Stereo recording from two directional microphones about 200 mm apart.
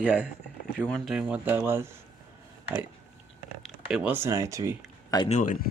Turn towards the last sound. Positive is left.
turn(degrees=35)  # may be behind; listen again after turning